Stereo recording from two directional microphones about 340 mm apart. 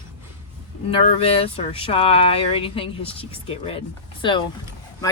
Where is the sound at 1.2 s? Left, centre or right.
Centre.